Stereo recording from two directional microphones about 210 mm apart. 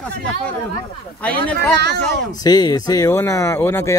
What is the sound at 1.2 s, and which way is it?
Speech, 5° left (ahead or behind).